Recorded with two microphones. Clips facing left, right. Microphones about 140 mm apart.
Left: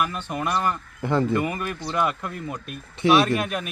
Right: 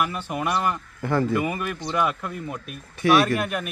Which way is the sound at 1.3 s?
5° right (ahead or behind).